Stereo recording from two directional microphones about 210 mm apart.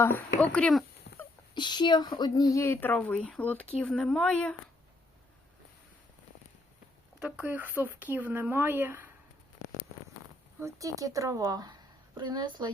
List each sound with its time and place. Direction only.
0.5 s speech: 5° left (ahead or behind)
1.1 s a sound: 60° left (ahead or behind)
1.5 s speech: 20° left (ahead or behind); by 4.5 s 5° left (ahead or behind)
7.2 s speech: 5° right (ahead or behind)
10.6 s a woman's voice: 15° right (ahead or behind)